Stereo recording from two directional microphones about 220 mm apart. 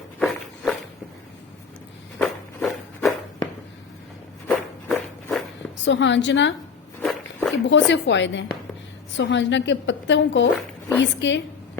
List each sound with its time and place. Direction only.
0.2 s walk: centre (ahead or behind)
2.1 s walk: 5° left (ahead or behind)
4.4 s walk: centre (ahead or behind)
5.8 s a woman's voice: 55° left (ahead or behind)
7.0 s a sound: centre (ahead or behind)
7.7 s a woman's voice: 55° left (ahead or behind)